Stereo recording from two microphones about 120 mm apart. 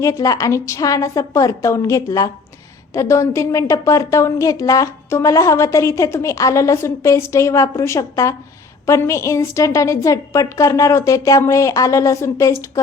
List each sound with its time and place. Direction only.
0.0 s a woman's voice: 25° left (ahead or behind)